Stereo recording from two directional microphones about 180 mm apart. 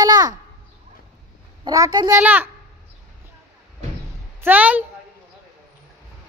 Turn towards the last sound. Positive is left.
turn(degrees=-10)  # may be behind; listen again after turning